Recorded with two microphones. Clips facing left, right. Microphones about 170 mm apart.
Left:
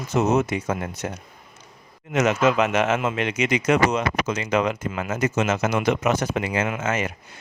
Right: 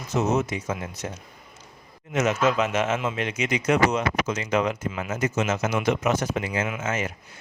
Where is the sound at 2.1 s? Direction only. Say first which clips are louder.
Left 3 dB; 75° left (ahead or behind).